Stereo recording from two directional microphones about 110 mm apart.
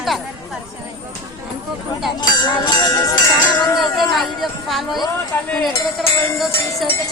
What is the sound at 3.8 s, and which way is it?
A woman's voice, centre (ahead or behind).